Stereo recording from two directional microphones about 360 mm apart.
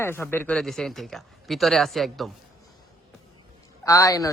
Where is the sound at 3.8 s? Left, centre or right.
Centre.